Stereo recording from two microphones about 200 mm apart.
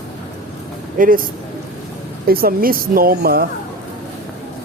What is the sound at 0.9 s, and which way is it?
Speech, 45° right (ahead or behind).